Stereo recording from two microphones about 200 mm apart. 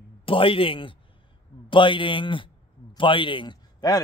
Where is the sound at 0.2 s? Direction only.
25° left (ahead or behind).